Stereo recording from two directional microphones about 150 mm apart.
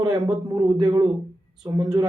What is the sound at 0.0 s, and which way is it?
A man's voice, 25° right (ahead or behind).